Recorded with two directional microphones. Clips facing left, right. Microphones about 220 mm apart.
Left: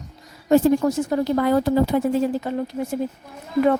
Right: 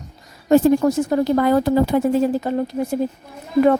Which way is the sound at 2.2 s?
40° right (ahead or behind).